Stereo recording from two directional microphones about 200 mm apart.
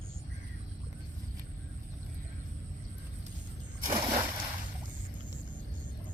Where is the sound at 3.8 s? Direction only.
20° right (ahead or behind).